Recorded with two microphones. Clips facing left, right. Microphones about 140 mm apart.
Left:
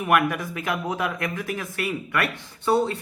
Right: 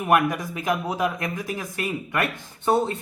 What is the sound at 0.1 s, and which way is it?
Speech, 20° right (ahead or behind).